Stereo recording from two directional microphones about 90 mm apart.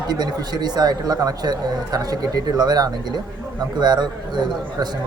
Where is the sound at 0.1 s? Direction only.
50° right (ahead or behind).